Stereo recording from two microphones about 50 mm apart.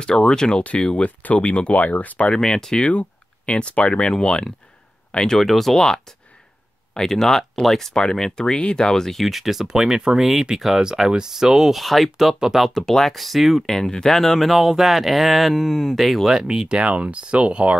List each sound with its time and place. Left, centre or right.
0.2 s speech: centre
1.0 s speech: left
2.3 s speech: centre
2.9 s speech: left; by 5.9 s centre
6.9 s speech: centre
13.7 s speech: centre
16.3 s speech: centre